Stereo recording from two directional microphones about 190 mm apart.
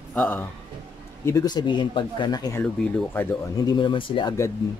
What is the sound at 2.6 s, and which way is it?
Speech, 5° left (ahead or behind).